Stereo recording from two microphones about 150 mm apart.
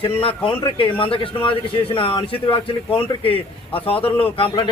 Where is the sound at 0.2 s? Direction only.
35° left (ahead or behind).